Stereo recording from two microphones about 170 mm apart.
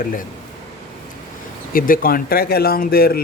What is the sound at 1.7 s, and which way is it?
Speech, 55° left (ahead or behind).